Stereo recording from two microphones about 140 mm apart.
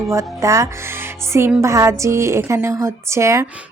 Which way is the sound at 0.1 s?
20° right (ahead or behind).